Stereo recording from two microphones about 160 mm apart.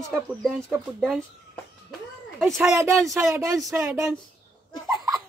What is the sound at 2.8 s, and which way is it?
Speech, 20° right (ahead or behind).